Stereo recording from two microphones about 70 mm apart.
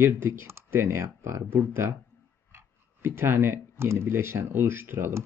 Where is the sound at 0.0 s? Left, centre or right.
Right.